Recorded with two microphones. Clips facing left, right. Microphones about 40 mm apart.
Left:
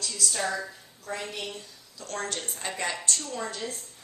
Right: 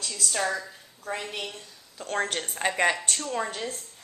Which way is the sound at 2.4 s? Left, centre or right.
Right.